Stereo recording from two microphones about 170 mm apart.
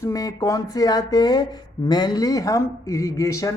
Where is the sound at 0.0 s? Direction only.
20° left (ahead or behind).